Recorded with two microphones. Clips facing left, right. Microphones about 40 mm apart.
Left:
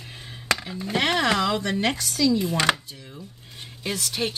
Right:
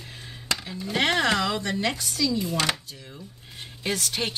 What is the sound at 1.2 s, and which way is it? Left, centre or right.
Speech, left.